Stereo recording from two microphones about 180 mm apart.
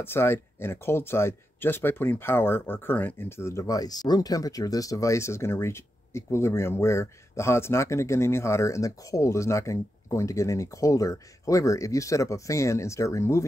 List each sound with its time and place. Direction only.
0.0 s speech: 15° left (ahead or behind)